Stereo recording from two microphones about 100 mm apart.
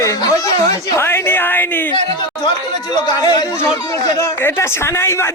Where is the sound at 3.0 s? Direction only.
40° left (ahead or behind).